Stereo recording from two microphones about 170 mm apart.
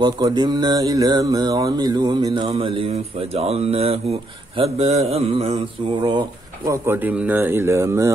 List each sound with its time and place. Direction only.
0.0 s mantra: 25° right (ahead or behind)
6.7 s speech: 10° right (ahead or behind)